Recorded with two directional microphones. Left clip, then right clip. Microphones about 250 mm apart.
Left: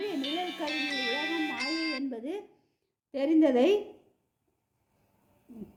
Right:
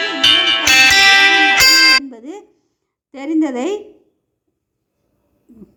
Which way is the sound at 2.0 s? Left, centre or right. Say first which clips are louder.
Right 4 dB; centre.